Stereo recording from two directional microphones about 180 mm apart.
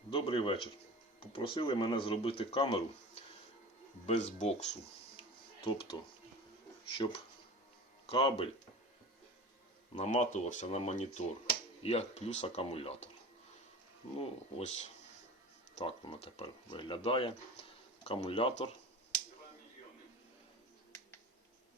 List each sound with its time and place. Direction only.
0.1 s speech: 30° left (ahead or behind)
9.9 s speech: 40° left (ahead or behind)
14.2 s speech: 40° left (ahead or behind)